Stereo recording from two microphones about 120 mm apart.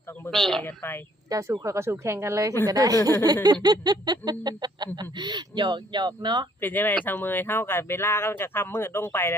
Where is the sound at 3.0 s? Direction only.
25° left (ahead or behind).